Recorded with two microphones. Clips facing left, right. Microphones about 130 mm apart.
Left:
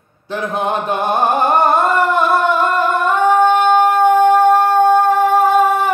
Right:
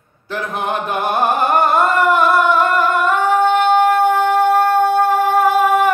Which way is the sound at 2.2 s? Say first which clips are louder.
Right 1 dB; 25° left (ahead or behind).